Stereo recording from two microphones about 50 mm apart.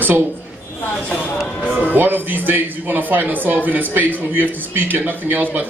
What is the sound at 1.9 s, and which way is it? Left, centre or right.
A man's voice, right.